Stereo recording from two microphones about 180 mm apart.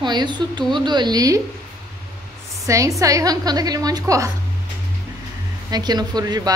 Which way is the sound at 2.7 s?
15° right (ahead or behind).